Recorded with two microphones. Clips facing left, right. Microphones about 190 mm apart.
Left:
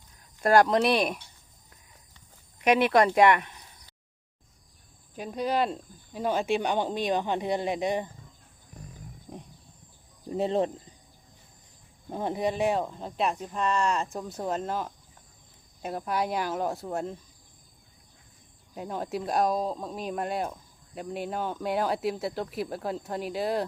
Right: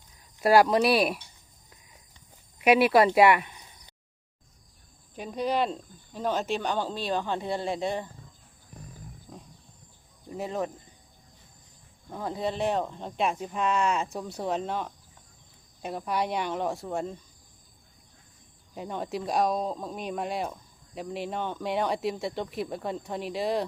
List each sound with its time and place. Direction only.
0.4 s speech: 5° right (ahead or behind)
2.6 s speech: 5° right (ahead or behind)
5.1 s speech: centre (ahead or behind)
9.3 s wild animals: 20° left (ahead or behind)
10.2 s speech: 30° left (ahead or behind)
12.0 s speech: 25° left (ahead or behind); by 17.2 s centre (ahead or behind)
18.7 s speech: centre (ahead or behind)